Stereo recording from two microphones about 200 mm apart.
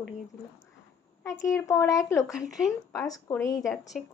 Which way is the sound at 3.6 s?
Centre (ahead or behind).